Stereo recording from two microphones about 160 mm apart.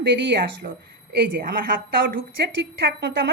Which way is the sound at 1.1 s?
75° right (ahead or behind).